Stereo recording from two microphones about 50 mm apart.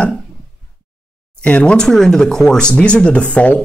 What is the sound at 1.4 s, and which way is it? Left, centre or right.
Speech, left.